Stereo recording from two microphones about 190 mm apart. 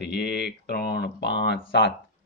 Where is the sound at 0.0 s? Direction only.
60° left (ahead or behind).